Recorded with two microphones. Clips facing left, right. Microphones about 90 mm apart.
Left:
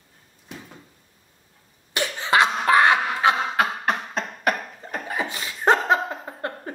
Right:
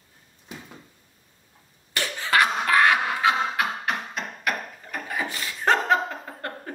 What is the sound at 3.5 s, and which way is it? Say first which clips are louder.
Beatboxing: left 4 dB; 35° left (ahead or behind).